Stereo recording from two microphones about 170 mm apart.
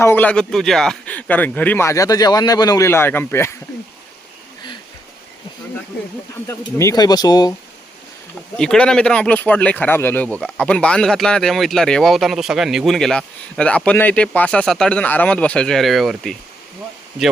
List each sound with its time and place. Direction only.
0.0 s speech: 10° left (ahead or behind)
6.5 s speech: 15° left (ahead or behind)
8.5 s speech: 5° left (ahead or behind)